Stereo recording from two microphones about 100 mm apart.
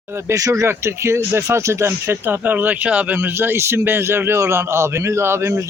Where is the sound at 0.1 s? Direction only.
25° right (ahead or behind).